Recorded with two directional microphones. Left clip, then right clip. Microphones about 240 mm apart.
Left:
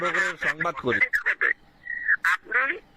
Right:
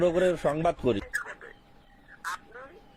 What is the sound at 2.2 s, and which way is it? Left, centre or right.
Quack, left.